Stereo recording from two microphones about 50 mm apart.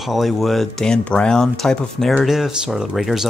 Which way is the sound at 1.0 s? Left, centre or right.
Centre.